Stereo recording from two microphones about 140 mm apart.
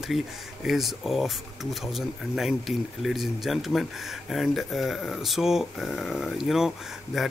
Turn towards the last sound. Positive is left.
turn(degrees=0)  # may be behind; listen again after turning